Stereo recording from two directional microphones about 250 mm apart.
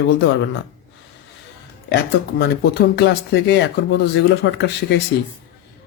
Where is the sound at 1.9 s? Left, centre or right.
Left.